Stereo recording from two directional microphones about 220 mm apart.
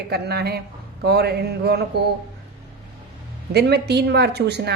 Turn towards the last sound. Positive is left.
turn(degrees=-50)  # may be behind; listen again after turning